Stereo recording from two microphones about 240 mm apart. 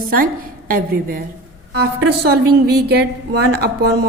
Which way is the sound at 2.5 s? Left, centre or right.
Right.